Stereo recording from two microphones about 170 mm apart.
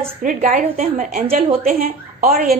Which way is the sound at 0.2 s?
50° right (ahead or behind).